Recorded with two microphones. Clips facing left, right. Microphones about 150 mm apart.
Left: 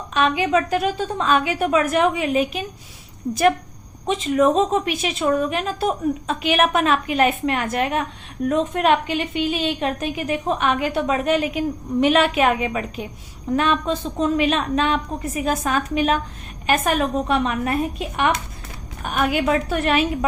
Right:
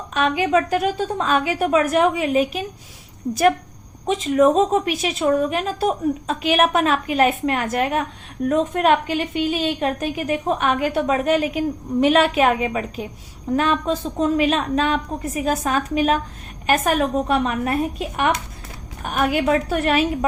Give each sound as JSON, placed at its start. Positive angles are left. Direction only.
{"t": 0.1, "sound": "a woman's voice", "side_deg": -45}
{"t": 4.0, "sound": "a woman's voice", "side_deg": -45}